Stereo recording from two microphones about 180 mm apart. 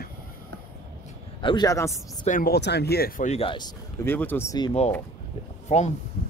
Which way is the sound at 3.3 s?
30° left (ahead or behind).